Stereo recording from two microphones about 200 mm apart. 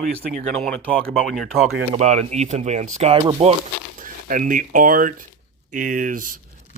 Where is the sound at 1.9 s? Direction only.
35° right (ahead or behind).